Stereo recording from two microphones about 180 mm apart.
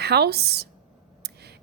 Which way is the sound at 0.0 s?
65° right (ahead or behind).